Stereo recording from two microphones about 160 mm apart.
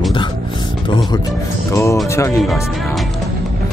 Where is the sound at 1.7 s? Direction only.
20° left (ahead or behind).